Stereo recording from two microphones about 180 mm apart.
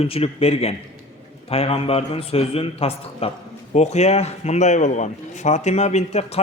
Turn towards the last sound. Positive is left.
turn(degrees=35)  # may be behind; listen again after turning